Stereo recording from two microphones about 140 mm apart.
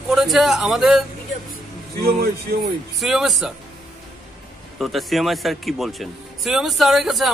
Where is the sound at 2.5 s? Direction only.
90° right.